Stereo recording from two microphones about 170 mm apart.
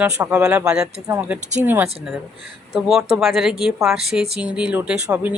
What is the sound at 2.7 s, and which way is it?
A woman's voice, centre (ahead or behind).